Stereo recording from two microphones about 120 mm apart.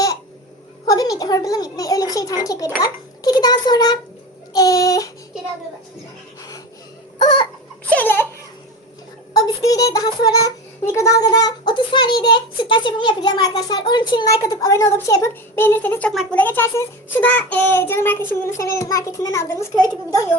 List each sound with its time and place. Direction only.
0.9 s child singing: 30° left (ahead or behind)
4.5 s a child's voice: 30° left (ahead or behind)
7.9 s laughter: 15° left (ahead or behind)
9.3 s child singing: 30° left (ahead or behind); by 16.1 s 15° left (ahead or behind)
16.3 s a child's voice: 15° left (ahead or behind)